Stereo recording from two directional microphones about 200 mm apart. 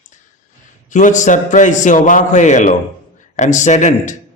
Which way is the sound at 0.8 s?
40° left (ahead or behind).